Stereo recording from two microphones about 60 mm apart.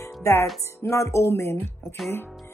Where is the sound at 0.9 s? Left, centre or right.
Left.